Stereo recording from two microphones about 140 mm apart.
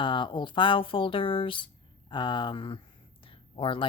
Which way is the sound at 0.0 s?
35° left (ahead or behind).